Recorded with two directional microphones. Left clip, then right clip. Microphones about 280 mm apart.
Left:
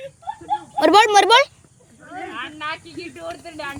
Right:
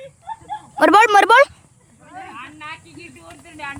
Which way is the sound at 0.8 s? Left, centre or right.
Centre.